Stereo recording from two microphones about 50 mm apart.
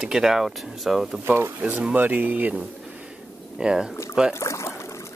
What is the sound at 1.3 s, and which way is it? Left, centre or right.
Speech, right.